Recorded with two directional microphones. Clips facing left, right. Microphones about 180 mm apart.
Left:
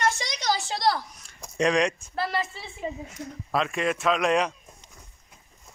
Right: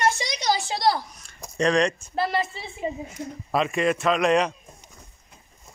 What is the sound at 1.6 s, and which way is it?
Speech, 10° left (ahead or behind).